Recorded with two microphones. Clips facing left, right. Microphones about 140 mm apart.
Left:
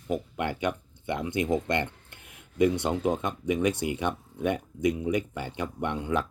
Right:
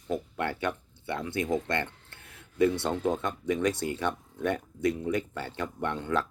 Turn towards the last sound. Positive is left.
turn(degrees=15)  # may be behind; listen again after turning